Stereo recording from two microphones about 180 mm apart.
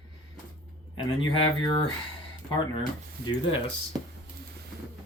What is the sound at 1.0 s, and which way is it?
Speech, 30° left (ahead or behind).